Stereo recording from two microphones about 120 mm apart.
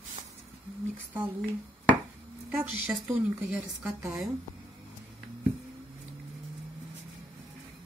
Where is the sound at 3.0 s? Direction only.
10° right (ahead or behind).